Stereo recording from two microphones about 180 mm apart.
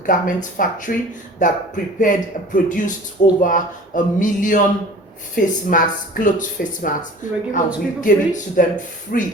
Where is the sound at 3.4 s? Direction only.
50° left (ahead or behind).